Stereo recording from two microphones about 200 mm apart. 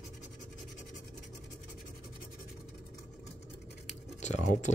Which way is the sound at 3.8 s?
35° left (ahead or behind).